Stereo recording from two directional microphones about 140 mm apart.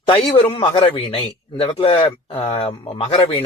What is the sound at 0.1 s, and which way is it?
A man's voice, 40° left (ahead or behind).